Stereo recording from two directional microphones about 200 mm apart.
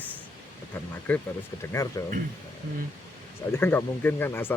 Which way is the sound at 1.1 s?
10° left (ahead or behind).